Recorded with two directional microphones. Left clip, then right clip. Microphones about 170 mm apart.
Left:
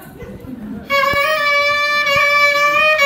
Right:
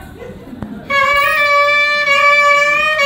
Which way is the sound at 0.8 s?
30° left (ahead or behind).